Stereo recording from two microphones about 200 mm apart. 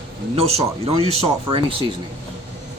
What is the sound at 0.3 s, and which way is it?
Speech, 30° right (ahead or behind).